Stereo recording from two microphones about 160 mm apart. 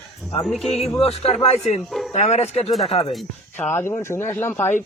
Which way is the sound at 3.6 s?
15° left (ahead or behind).